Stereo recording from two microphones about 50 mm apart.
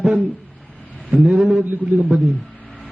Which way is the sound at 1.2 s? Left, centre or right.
Centre.